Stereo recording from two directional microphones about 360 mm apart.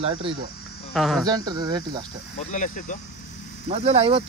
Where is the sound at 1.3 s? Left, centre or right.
Centre.